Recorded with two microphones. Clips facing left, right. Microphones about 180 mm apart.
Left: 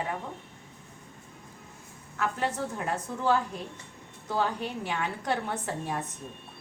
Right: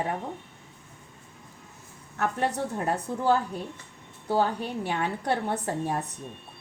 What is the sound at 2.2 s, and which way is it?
A woman's voice, 40° right (ahead or behind).